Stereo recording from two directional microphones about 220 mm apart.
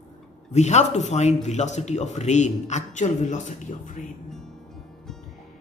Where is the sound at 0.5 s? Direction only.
30° left (ahead or behind).